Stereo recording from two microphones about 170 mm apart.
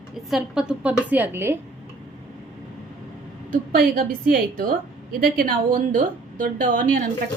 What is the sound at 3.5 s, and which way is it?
A woman's voice, 55° right (ahead or behind).